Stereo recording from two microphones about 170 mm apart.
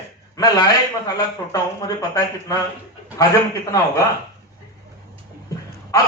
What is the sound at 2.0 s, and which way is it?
Speech, 20° left (ahead or behind).